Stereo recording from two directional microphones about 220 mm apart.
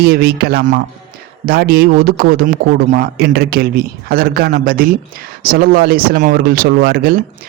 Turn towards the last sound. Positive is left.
turn(degrees=-45)  # may be behind; listen again after turning